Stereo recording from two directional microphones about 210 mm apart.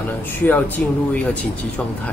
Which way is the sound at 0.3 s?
10° left (ahead or behind).